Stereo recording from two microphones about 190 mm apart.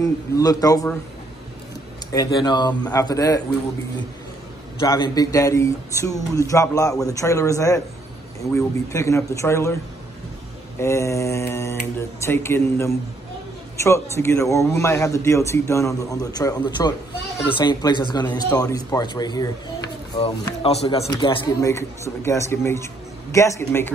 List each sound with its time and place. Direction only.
0.0 s a man's voice: 20° left (ahead or behind)
2.1 s a man's voice: 20° left (ahead or behind)
4.7 s a man's voice: 25° left (ahead or behind)
10.8 s a man's voice: 15° left (ahead or behind)
20.6 s a man's voice: 30° left (ahead or behind); by 23.9 s 15° left (ahead or behind)